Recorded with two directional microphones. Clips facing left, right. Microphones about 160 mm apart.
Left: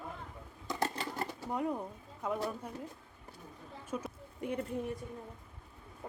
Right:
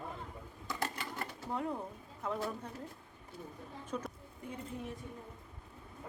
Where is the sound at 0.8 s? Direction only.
35° left (ahead or behind).